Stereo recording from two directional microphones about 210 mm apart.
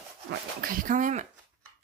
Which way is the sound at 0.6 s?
40° right (ahead or behind).